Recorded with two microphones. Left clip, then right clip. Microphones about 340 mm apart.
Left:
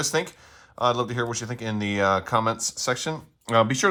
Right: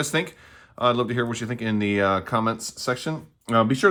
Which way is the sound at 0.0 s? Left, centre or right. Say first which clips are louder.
Even; centre.